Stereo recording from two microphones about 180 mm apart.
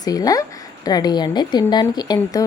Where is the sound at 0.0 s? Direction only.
20° left (ahead or behind).